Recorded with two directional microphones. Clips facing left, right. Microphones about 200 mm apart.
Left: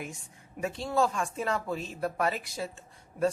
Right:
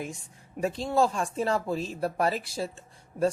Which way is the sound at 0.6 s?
30° right (ahead or behind).